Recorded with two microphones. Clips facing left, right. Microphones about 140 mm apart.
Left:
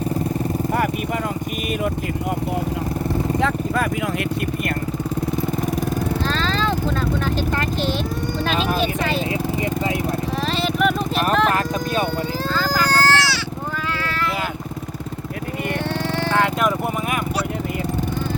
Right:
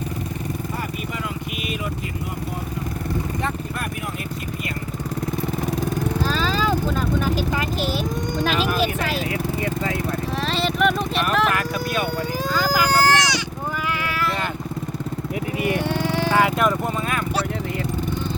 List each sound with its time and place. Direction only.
6.2 s vehicle: 10° right (ahead or behind)
8.8 s vehicle: 5° right (ahead or behind)
9.6 s vehicle: 20° left (ahead or behind)
10.4 s vehicle: centre (ahead or behind)
12.5 s baby cry: 10° right (ahead or behind)
15.6 s vehicle: 10° right (ahead or behind)